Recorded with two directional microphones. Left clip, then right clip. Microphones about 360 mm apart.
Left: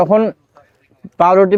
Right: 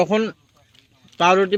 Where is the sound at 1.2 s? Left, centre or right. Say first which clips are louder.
Left 6 dB; left.